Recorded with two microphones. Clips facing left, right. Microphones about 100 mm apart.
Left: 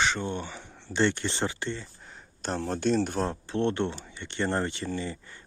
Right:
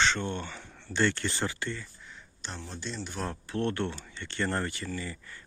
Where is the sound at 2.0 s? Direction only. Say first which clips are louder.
Left 9 dB; 45° left (ahead or behind).